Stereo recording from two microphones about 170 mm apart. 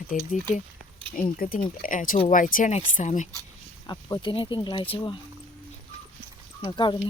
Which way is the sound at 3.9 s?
25° left (ahead or behind).